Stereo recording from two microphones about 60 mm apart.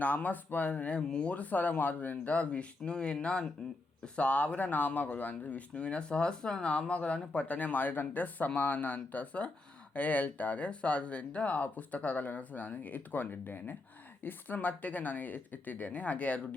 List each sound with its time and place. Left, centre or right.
0.0 s speech: left